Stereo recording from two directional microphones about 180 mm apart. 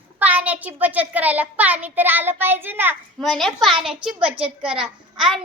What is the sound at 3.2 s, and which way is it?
A child's voice, centre (ahead or behind).